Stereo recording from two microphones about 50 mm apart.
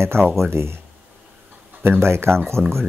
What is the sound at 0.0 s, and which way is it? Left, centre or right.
Speech, right.